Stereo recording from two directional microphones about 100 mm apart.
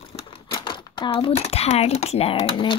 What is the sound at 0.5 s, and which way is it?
Speech, 50° left (ahead or behind).